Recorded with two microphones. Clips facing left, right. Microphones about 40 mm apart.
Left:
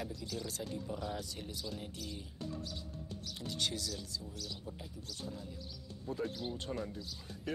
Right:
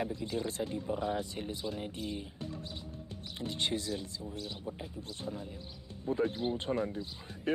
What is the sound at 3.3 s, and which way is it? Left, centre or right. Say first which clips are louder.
Speech: right 4 dB; right.